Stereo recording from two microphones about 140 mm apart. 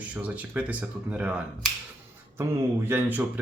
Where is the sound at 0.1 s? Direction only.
10° right (ahead or behind).